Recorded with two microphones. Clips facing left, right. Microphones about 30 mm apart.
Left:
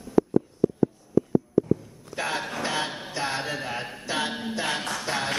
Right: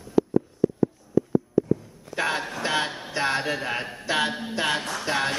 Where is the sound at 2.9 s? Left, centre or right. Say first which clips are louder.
Even; centre.